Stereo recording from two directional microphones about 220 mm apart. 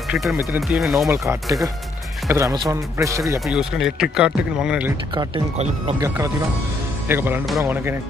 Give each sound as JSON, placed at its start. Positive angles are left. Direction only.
{"t": 0.1, "sound": "speech", "side_deg": 0}
{"t": 1.1, "sound": "speech", "side_deg": -10}
{"t": 3.3, "sound": "speech", "side_deg": 0}
{"t": 5.1, "sound": "speech", "side_deg": -20}
{"t": 6.0, "sound": "speech", "side_deg": -15}